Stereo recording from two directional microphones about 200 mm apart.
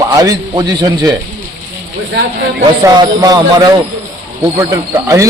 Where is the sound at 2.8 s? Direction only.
20° right (ahead or behind).